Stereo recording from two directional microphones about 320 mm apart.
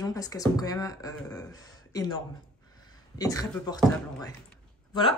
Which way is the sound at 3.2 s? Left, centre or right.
Centre.